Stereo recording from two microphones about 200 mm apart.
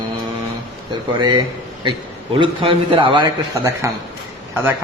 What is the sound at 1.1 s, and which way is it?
A man's voice, 25° right (ahead or behind).